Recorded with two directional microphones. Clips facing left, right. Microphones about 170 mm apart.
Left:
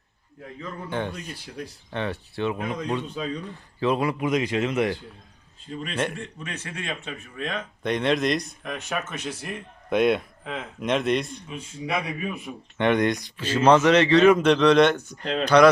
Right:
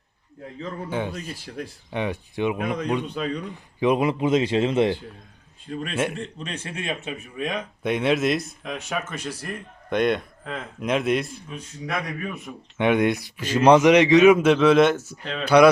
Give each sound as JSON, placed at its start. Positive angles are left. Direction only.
{"t": 0.9, "sound": "a man's voice", "side_deg": -5}
{"t": 5.9, "sound": "speech", "side_deg": -5}
{"t": 6.1, "sound": "a man's voice", "side_deg": -30}
{"t": 12.7, "sound": "speech", "side_deg": -5}
{"t": 15.2, "sound": "speech", "side_deg": 35}
{"t": 15.4, "sound": "speech", "side_deg": -10}